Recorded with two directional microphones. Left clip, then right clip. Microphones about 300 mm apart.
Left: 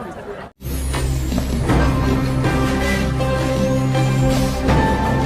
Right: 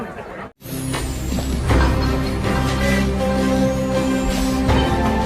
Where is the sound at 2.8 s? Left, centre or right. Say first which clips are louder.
Right 1 dB; centre.